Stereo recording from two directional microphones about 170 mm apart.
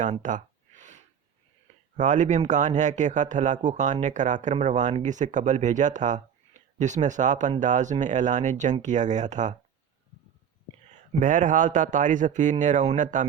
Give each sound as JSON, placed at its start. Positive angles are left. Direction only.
{"t": 0.0, "sound": "a sound", "side_deg": -45}
{"t": 2.0, "sound": "speech", "side_deg": -45}
{"t": 11.2, "sound": "speech", "side_deg": -50}